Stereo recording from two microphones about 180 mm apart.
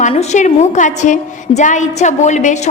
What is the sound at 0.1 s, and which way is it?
A woman's voice, 40° left (ahead or behind).